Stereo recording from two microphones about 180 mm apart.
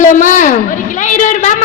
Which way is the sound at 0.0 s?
45° left (ahead or behind).